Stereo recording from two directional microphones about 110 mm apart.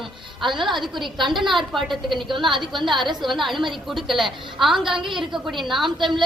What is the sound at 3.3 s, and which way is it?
A woman's voice, centre (ahead or behind).